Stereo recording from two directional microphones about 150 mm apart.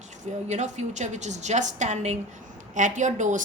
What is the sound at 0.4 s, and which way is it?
A woman's voice, 50° right (ahead or behind).